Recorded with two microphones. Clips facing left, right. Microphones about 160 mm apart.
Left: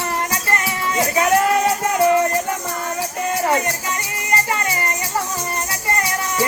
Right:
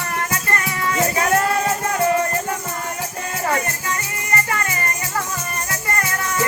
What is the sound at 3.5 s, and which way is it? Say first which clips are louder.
Music: left 2 dB; 25° left (ahead or behind).